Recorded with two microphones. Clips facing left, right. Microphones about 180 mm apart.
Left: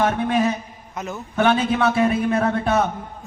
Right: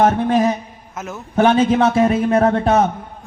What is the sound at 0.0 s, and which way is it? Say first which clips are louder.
Speech: right 5 dB; 40° right (ahead or behind).